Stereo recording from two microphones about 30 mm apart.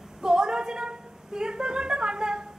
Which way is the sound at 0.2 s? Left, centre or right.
Right.